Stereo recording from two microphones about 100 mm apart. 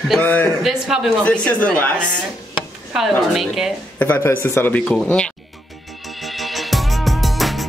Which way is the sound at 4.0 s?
20° left (ahead or behind).